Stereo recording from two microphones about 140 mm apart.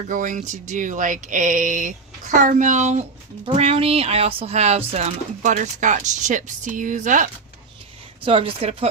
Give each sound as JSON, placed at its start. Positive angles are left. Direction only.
{"t": 0.1, "sound": "speech", "side_deg": -70}
{"t": 3.5, "sound": "speech", "side_deg": -45}
{"t": 8.2, "sound": "speech", "side_deg": -40}